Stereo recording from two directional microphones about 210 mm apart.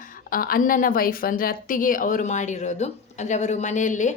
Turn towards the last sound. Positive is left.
turn(degrees=35)  # may be behind; listen again after turning